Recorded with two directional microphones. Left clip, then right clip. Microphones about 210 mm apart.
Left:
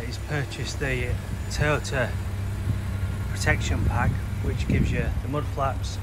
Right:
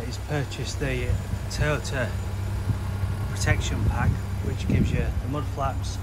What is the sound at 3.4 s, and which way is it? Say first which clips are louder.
Speech: left 3 dB; 10° right (ahead or behind).